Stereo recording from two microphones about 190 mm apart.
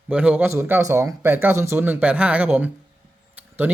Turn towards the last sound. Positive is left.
turn(degrees=-10)  # may be behind; listen again after turning